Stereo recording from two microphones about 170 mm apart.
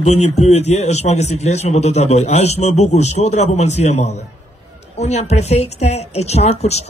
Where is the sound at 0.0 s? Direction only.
40° left (ahead or behind).